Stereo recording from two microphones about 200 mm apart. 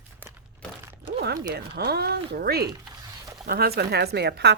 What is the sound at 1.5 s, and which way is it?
Speech, 55° right (ahead or behind).